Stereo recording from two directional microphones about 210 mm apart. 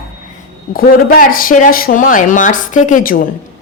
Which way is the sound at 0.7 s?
40° left (ahead or behind).